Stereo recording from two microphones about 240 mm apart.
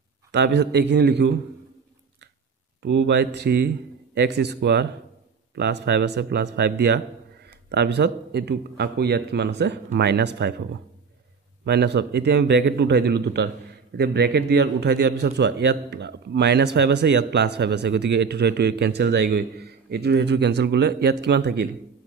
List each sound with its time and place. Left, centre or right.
0.3 s a man's voice: right
2.8 s a man's voice: right
11.6 s a man's voice: right